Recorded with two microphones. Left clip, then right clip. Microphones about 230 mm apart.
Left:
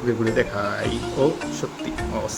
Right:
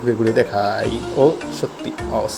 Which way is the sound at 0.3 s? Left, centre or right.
Centre.